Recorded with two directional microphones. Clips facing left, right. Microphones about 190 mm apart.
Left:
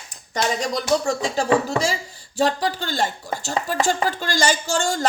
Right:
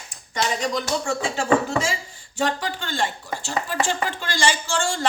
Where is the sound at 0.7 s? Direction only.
40° left (ahead or behind).